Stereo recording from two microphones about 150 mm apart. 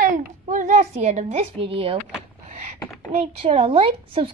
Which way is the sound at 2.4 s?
50° right (ahead or behind).